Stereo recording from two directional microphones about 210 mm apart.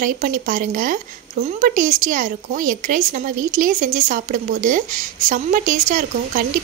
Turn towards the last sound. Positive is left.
turn(degrees=-40)  # may be behind; listen again after turning